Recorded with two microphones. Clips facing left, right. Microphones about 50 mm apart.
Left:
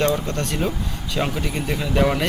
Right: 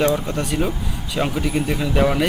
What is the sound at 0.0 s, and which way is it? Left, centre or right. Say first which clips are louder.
Speech: right 2 dB; centre.